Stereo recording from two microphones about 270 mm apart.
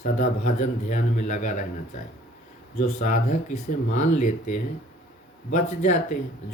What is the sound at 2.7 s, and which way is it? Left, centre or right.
Speech, left.